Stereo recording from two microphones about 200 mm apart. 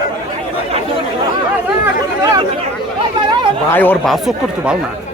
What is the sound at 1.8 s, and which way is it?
Speech, 20° right (ahead or behind).